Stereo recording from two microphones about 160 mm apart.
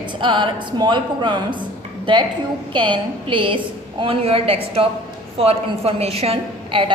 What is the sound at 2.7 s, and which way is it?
A woman's voice, 30° right (ahead or behind).